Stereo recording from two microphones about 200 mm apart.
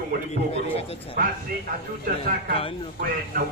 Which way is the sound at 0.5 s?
30° left (ahead or behind).